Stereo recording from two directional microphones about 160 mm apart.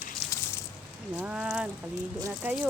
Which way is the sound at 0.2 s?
5° left (ahead or behind).